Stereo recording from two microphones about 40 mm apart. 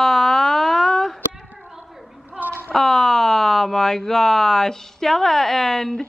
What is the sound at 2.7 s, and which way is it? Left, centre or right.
A woman's voice, centre.